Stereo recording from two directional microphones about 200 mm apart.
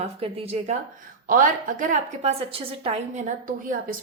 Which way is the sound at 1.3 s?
40° right (ahead or behind).